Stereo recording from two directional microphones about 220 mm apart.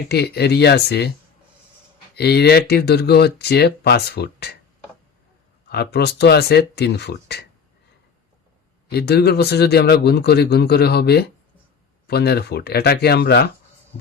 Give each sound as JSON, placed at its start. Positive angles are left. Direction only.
{"t": 0.1, "sound": "speech", "side_deg": 50}
{"t": 2.1, "sound": "speech", "side_deg": 45}
{"t": 5.6, "sound": "speech", "side_deg": 45}
{"t": 8.9, "sound": "speech", "side_deg": 45}